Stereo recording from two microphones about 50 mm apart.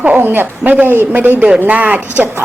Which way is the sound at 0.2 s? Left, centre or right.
Right.